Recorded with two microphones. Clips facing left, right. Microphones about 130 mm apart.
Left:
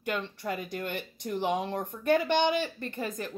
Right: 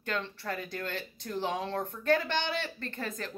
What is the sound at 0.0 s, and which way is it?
Speech, 15° left (ahead or behind).